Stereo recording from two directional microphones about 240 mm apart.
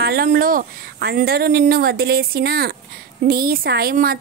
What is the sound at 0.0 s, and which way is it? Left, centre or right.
A woman's voice, right.